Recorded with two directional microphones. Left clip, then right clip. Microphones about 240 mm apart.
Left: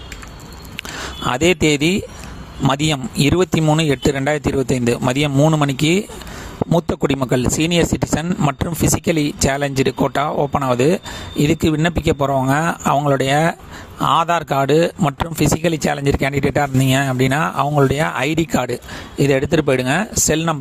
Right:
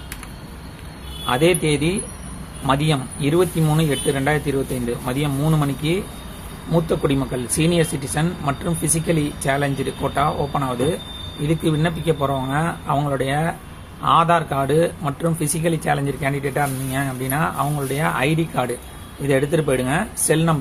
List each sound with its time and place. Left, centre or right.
1.3 s a man's voice: left